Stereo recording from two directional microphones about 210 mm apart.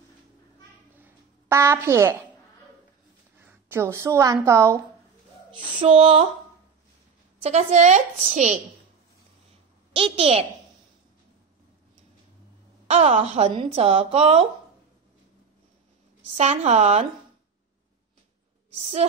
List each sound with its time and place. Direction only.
1.0 s a sound: 15° right (ahead or behind)
3.3 s speech: 10° right (ahead or behind)
5.8 s speech: 25° right (ahead or behind)
7.4 s a woman's voice: 30° right (ahead or behind)
9.9 s speech: 25° right (ahead or behind)
12.8 s a woman's voice: 30° right (ahead or behind)
16.3 s a woman's voice: 35° right (ahead or behind)
18.8 s a woman's voice: 30° right (ahead or behind)